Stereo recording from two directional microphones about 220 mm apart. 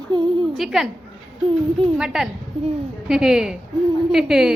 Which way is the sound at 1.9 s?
5° right (ahead or behind).